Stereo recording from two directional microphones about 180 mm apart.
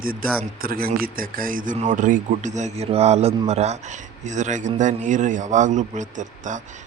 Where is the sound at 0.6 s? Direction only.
55° right (ahead or behind).